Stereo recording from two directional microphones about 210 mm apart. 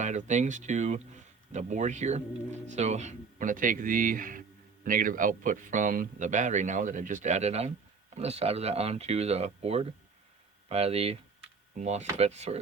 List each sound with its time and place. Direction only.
0.0 s speech: 35° right (ahead or behind)